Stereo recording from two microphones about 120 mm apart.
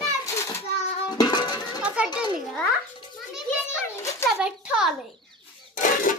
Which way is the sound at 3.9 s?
25° left (ahead or behind).